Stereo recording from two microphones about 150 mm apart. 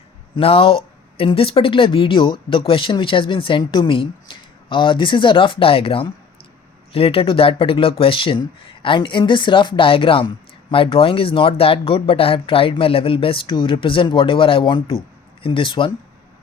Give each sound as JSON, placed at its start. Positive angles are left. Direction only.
{"t": 0.3, "sound": "speech", "side_deg": 40}